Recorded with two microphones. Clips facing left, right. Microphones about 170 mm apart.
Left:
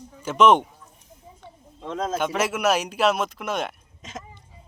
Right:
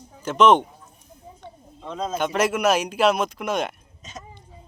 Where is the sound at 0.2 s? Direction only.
10° left (ahead or behind).